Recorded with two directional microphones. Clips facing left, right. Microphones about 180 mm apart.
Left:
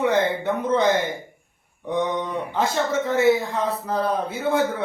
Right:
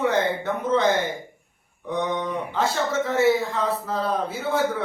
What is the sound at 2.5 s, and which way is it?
Speech, 15° left (ahead or behind).